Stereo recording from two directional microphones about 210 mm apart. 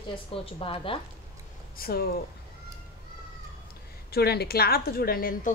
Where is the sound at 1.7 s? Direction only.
45° left (ahead or behind).